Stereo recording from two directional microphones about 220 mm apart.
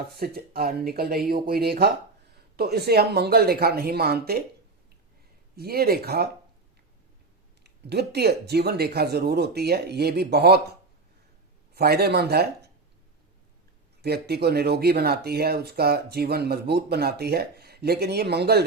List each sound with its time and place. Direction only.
0.0 s speech: 45° right (ahead or behind)
5.5 s speech: 45° right (ahead or behind)
7.6 s speech: 50° right (ahead or behind)
11.7 s speech: 45° right (ahead or behind)
14.0 s speech: 45° right (ahead or behind)